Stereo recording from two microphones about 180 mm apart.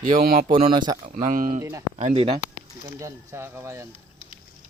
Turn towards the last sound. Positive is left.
turn(degrees=-15)  # may be behind; listen again after turning